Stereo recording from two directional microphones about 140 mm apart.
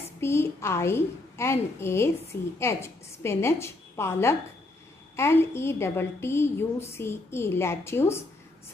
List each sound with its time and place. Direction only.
0.2 s a woman's voice: 20° left (ahead or behind)